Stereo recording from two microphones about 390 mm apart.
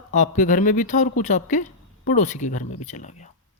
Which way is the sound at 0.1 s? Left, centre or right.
Centre.